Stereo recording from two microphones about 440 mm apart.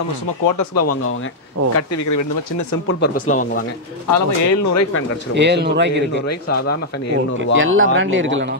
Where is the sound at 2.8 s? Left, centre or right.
Left.